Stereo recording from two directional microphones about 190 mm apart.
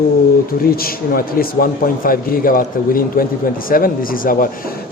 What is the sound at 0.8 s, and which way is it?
A man's voice, 50° left (ahead or behind).